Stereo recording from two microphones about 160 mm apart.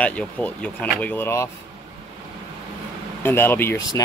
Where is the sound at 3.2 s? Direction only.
15° left (ahead or behind).